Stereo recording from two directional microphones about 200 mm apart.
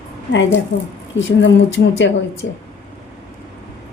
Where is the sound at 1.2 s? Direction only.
65° left (ahead or behind).